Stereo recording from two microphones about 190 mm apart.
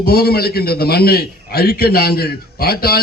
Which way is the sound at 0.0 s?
55° left (ahead or behind).